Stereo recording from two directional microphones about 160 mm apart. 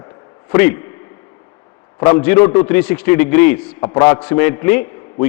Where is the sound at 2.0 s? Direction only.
15° left (ahead or behind).